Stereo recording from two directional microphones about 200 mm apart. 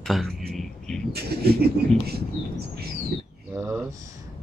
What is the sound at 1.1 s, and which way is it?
Speech, 50° right (ahead or behind).